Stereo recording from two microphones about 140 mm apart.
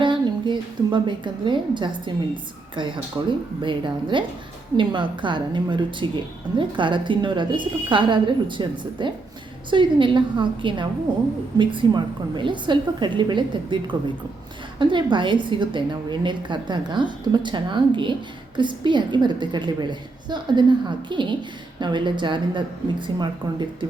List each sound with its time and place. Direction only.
0.0 s a woman's voice: 35° right (ahead or behind)